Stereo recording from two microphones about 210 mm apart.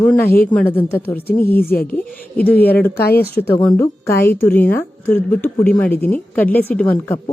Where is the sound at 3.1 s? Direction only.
50° left (ahead or behind).